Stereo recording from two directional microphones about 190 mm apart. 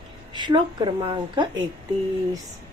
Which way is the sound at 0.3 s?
25° right (ahead or behind).